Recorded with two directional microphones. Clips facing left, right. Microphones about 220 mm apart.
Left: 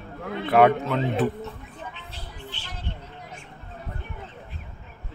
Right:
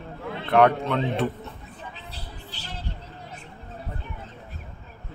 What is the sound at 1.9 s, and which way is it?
Vehicle, 35° right (ahead or behind).